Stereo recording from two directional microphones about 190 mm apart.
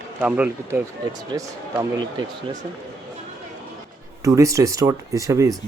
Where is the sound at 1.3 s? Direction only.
20° right (ahead or behind).